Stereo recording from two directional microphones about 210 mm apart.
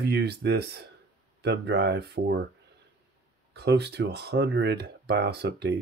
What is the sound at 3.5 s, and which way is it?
Speech, 50° right (ahead or behind).